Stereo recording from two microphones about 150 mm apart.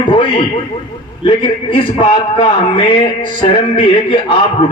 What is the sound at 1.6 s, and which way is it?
Speech, 35° left (ahead or behind).